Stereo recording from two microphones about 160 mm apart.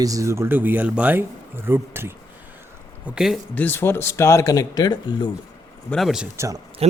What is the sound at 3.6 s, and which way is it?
Speech, 15° left (ahead or behind).